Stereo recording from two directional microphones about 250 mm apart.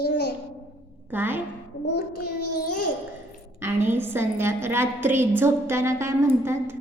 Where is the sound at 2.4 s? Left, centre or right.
Left.